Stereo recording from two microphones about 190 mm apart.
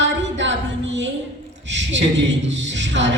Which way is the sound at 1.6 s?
70° right (ahead or behind).